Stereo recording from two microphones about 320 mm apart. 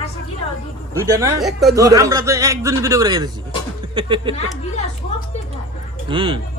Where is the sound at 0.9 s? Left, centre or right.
Centre.